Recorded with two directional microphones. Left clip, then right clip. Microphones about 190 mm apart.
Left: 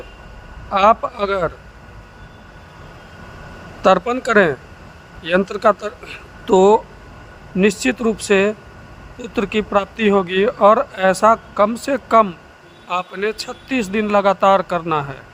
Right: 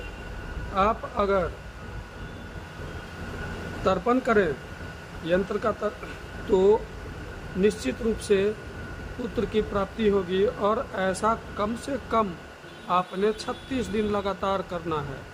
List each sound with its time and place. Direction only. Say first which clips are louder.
0.7 s speech: left 11 dB; 45° left (ahead or behind)
3.8 s speech: left 9 dB; 45° left (ahead or behind)